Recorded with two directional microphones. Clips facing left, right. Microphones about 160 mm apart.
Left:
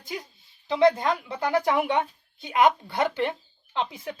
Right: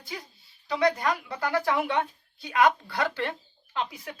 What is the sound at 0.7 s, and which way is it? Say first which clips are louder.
A woman's voice: left 4 dB; 25° left (ahead or behind).